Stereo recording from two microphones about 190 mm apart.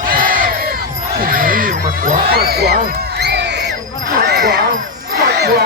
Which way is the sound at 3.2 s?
60° right (ahead or behind).